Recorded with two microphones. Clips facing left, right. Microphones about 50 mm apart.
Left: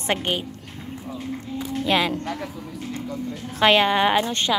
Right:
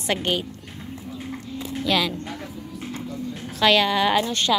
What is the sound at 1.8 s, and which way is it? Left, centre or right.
Speech, left.